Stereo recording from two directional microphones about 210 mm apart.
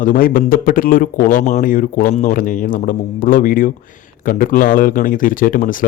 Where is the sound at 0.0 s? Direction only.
40° left (ahead or behind).